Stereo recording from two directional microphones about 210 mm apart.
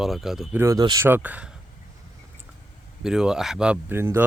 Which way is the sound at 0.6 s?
20° right (ahead or behind).